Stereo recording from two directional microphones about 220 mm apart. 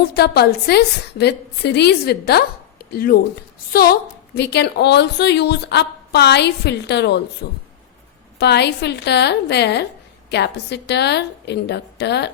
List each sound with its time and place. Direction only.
0.1 s a woman's voice: 45° left (ahead or behind)
4.4 s a woman's voice: 50° left (ahead or behind)